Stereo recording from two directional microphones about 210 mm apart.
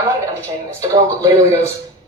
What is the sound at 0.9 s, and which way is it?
Speech, 15° right (ahead or behind).